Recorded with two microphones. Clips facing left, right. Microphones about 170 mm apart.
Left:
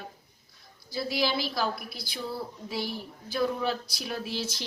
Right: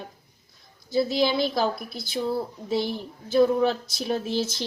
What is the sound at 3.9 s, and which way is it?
Speech, 25° right (ahead or behind).